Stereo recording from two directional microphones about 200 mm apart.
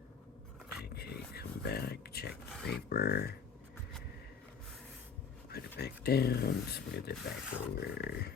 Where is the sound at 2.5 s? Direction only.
5° left (ahead or behind).